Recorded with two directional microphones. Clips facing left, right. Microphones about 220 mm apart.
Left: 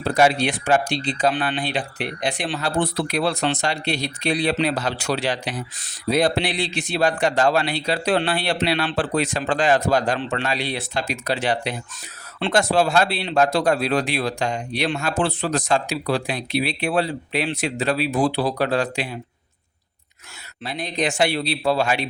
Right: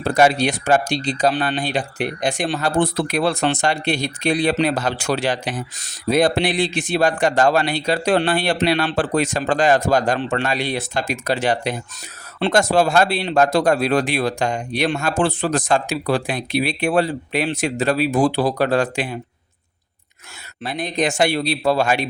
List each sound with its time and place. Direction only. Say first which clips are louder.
0.0 s speech: right 2 dB; 45° right (ahead or behind)
20.7 s speech: right 3 dB; 50° right (ahead or behind)